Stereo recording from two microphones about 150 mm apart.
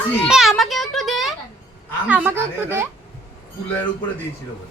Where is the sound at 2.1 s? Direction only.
10° right (ahead or behind).